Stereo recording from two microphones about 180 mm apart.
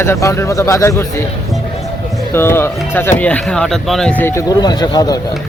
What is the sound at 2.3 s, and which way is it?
Speech, 15° left (ahead or behind).